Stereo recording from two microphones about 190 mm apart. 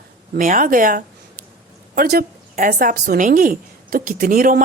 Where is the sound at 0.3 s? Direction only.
45° right (ahead or behind).